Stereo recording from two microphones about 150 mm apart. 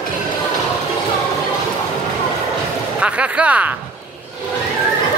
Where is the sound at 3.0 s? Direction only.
5° right (ahead or behind).